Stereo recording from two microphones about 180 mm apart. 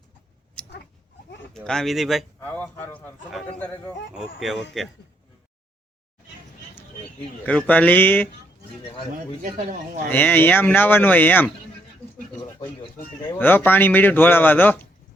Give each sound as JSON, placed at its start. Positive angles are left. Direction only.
{"t": 0.6, "sound": "a sound", "side_deg": 5}
{"t": 1.5, "sound": "a man's voice", "side_deg": 5}
{"t": 2.4, "sound": "a man's voice", "side_deg": 10}
{"t": 7.4, "sound": "speech", "side_deg": 10}
{"t": 9.4, "sound": "speech", "side_deg": -40}
{"t": 10.1, "sound": "speech", "side_deg": 10}
{"t": 12.4, "sound": "speech", "side_deg": 25}
{"t": 13.2, "sound": "speech", "side_deg": 10}